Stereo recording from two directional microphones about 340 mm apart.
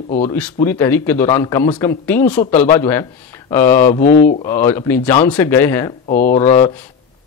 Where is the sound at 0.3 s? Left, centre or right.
Centre.